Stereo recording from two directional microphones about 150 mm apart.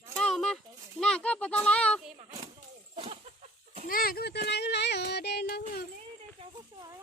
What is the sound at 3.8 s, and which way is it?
Speech, 75° left (ahead or behind).